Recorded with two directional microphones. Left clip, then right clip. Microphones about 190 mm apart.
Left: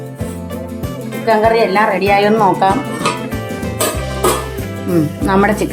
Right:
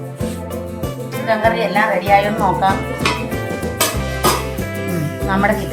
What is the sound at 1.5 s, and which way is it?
Speech, 55° left (ahead or behind).